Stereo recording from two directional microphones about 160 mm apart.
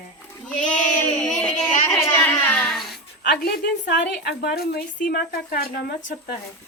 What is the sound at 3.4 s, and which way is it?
A woman's voice, 70° left (ahead or behind).